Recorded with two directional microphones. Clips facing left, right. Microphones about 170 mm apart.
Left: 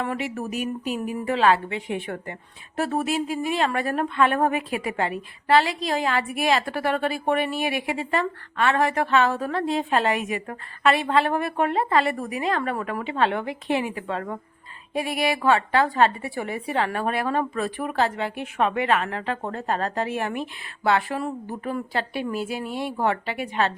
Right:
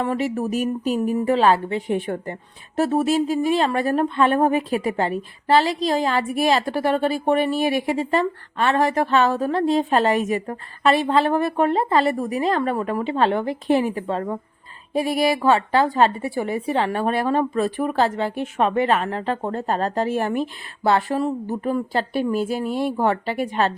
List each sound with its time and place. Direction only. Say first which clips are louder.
0.0 s a woman's voice: right 5 dB; 40° right (ahead or behind)
0.5 s a sound: right 6 dB; 40° right (ahead or behind)
1.2 s a woman's voice: right 1 dB; 35° right (ahead or behind)
22.6 s speech: right 6 dB; centre (ahead or behind)
23.0 s a woman's voice: right 4 dB; 35° right (ahead or behind)